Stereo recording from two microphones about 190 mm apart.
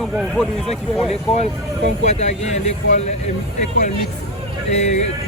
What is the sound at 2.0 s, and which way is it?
Speech, 35° left (ahead or behind).